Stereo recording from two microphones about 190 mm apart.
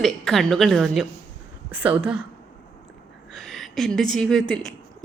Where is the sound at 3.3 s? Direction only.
Centre (ahead or behind).